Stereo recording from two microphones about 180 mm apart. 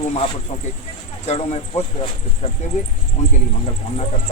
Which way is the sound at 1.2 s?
40° left (ahead or behind).